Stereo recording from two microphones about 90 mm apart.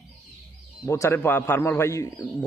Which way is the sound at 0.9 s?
30° left (ahead or behind).